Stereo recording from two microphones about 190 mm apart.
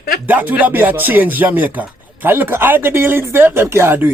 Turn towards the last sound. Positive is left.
turn(degrees=-10)  # may be behind; listen again after turning